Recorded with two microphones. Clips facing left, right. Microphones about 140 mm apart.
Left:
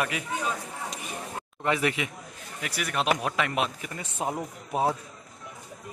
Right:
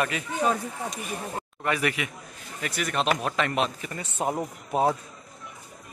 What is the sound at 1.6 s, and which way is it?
Speech, 20° left (ahead or behind).